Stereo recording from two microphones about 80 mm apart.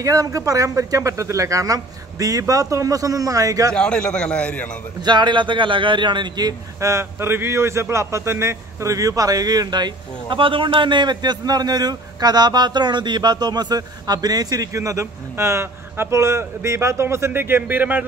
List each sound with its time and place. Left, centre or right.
0.0 s a man's voice: right
3.7 s a man's voice: centre
5.0 s a man's voice: right
6.8 s a man's voice: right